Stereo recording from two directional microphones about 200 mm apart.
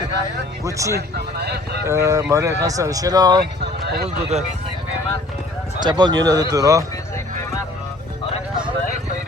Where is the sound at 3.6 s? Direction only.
55° right (ahead or behind).